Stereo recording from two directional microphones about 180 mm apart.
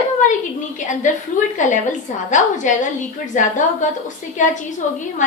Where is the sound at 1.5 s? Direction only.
45° left (ahead or behind).